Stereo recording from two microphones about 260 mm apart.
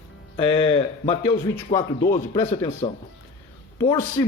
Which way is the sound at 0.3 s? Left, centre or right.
Centre.